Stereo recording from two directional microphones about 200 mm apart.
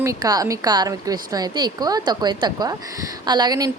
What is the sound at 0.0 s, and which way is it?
A woman's voice, 15° right (ahead or behind).